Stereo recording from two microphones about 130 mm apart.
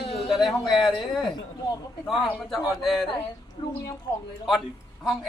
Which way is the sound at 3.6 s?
40° left (ahead or behind).